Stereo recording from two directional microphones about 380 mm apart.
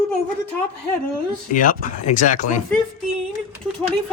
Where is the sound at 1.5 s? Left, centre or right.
Left.